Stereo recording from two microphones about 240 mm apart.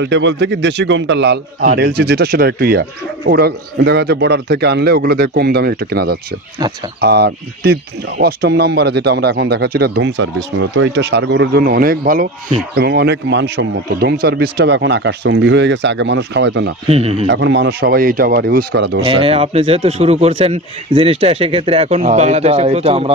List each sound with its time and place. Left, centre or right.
0.0 s a man's voice: right
16.9 s speech: right
17.3 s a man's voice: right
19.0 s speech: right